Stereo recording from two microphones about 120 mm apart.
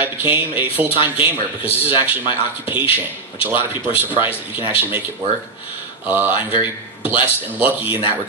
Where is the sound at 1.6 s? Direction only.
50° left (ahead or behind).